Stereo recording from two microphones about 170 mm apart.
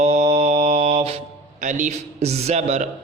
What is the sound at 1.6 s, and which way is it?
Mantra, 45° right (ahead or behind).